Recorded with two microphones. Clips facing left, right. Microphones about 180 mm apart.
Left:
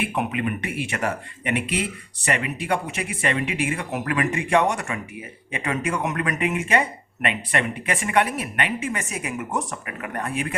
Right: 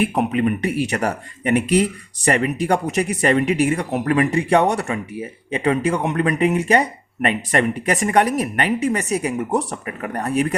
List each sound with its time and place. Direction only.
0.0 s speech: 35° right (ahead or behind)